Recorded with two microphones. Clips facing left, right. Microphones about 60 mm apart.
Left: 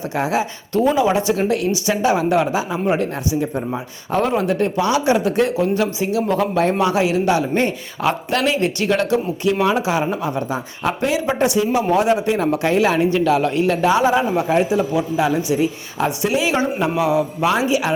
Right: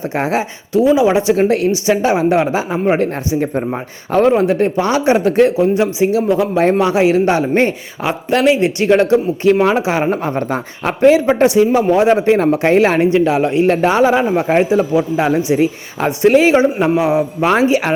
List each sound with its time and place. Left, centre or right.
0.1 s speech: right
0.7 s speech: centre
1.0 s speech: right
1.4 s speech: right
6.3 s speech: centre
6.7 s speech: right
13.7 s speech: right